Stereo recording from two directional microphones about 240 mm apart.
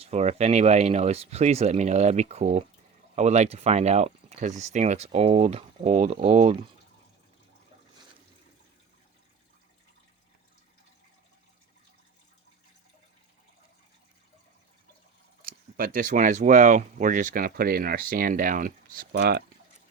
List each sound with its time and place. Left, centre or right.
0.0 s speech: right
15.4 s speech: right